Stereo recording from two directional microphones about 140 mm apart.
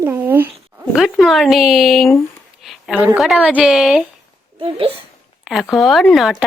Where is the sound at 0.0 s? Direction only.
15° right (ahead or behind).